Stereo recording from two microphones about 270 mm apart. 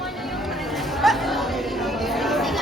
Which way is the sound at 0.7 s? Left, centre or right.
Centre.